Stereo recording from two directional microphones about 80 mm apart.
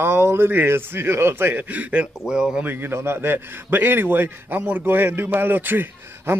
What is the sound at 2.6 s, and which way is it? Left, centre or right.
A man's voice, right.